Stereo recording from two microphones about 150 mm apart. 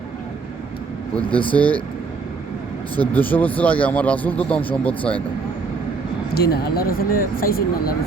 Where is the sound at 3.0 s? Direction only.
10° left (ahead or behind).